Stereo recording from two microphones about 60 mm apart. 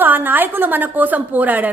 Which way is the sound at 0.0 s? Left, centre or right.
Right.